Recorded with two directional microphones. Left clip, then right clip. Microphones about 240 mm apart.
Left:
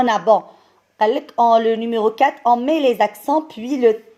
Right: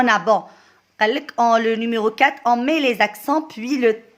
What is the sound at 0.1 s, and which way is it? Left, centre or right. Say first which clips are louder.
A woman's voice: left 2 dB; right.